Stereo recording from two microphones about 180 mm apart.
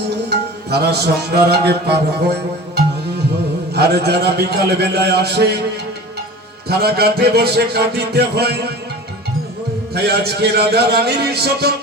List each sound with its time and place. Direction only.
0.3 s music: 65° right (ahead or behind)
3.8 s music: 65° right (ahead or behind)
6.7 s music: 60° right (ahead or behind)
9.9 s music: 65° right (ahead or behind)